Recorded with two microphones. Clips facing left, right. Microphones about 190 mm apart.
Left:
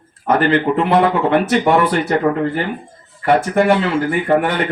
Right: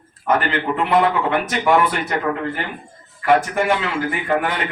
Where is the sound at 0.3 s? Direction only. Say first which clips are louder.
Left 5 dB; 35° left (ahead or behind).